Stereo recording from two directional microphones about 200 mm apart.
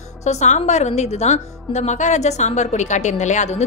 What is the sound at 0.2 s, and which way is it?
A woman's voice, 35° left (ahead or behind).